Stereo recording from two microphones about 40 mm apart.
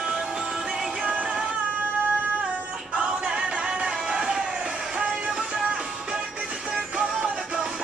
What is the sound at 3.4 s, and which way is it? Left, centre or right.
Music, centre.